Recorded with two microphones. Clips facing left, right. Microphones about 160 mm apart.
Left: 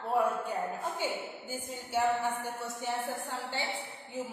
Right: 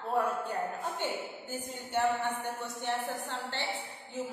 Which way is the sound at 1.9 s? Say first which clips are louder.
Left 1 dB; centre (ahead or behind).